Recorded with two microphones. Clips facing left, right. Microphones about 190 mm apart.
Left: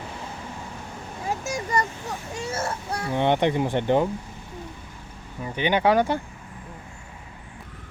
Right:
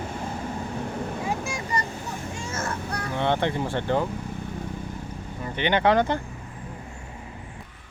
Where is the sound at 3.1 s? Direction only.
15° left (ahead or behind).